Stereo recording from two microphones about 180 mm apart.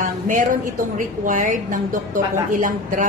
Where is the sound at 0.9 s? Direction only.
45° right (ahead or behind).